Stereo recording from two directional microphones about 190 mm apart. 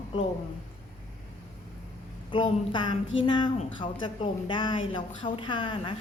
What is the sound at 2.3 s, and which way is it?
A woman's voice, 25° left (ahead or behind).